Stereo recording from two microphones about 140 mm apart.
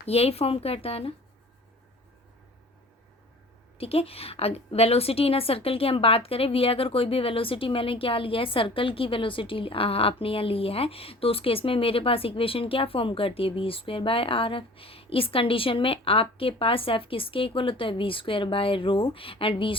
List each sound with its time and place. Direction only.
0.0 s speech: 50° left (ahead or behind)
3.8 s a woman's voice: 45° left (ahead or behind)